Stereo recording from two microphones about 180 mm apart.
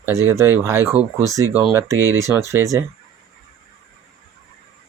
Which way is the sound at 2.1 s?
15° right (ahead or behind).